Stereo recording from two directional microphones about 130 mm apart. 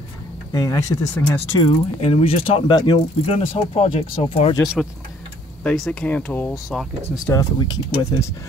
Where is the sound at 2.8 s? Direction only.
35° left (ahead or behind).